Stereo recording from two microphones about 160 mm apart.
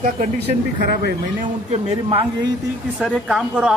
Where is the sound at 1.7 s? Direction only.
35° right (ahead or behind).